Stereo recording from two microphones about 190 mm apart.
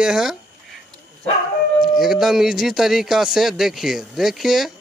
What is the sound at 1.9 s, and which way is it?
Speech, centre (ahead or behind).